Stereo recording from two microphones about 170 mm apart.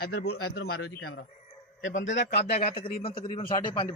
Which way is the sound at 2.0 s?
90° left.